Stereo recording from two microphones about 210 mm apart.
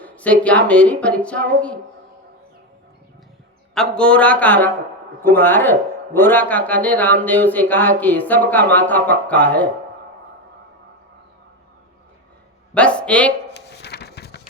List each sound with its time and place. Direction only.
0.0 s a woman's voice: 5° left (ahead or behind)
3.8 s a woman's voice: 5° left (ahead or behind)
12.7 s speech: 5° left (ahead or behind)
13.5 s a sound: 55° left (ahead or behind)